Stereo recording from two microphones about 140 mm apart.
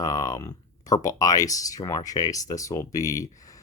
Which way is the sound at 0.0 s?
25° left (ahead or behind).